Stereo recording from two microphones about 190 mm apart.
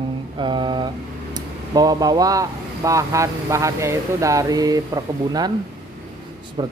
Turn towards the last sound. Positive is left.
turn(degrees=-25)  # may be behind; listen again after turning